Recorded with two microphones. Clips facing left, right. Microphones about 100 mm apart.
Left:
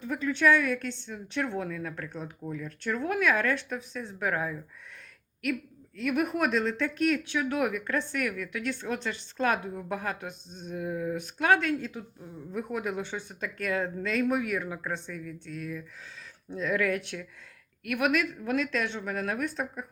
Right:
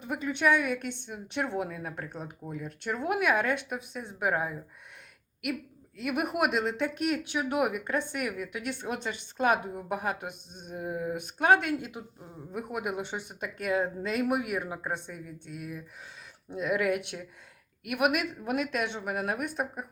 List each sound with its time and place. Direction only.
0.0 s speech: 15° right (ahead or behind)
6.0 s speech: 10° right (ahead or behind)